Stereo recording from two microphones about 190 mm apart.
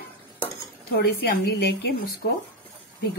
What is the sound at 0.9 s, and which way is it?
Speech, 60° left (ahead or behind).